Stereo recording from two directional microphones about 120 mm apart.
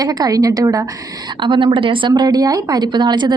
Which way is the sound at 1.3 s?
40° right (ahead or behind).